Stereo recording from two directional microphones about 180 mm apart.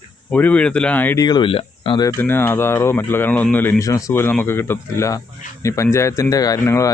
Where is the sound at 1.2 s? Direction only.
25° left (ahead or behind).